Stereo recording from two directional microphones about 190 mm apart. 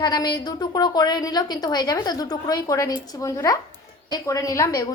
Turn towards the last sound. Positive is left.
turn(degrees=20)  # may be behind; listen again after turning